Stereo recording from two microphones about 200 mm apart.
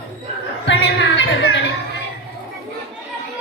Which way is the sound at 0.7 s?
65° left (ahead or behind).